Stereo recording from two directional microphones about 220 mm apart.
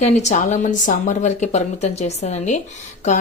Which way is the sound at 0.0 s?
30° left (ahead or behind).